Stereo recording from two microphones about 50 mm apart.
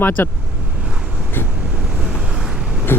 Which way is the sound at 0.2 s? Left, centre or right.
Left.